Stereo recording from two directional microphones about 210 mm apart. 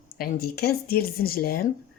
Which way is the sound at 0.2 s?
45° left (ahead or behind).